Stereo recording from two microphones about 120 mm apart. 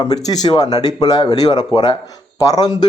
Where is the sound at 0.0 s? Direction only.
35° left (ahead or behind).